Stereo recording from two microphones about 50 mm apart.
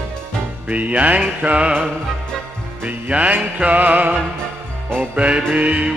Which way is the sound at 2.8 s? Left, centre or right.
Right.